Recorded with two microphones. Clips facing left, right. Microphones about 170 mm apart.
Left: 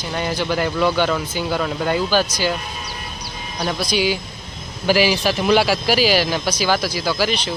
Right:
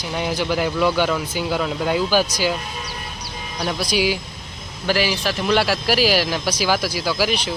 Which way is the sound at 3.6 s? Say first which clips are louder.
Left 1 dB; 5° right (ahead or behind).